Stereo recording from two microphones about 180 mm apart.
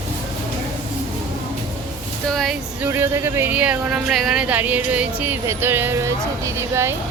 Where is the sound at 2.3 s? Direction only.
Centre (ahead or behind).